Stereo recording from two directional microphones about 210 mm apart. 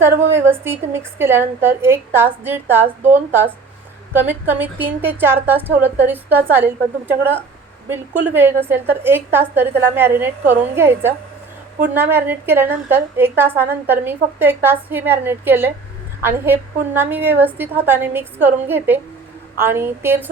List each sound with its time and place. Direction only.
0.3 s a woman's voice: 10° right (ahead or behind)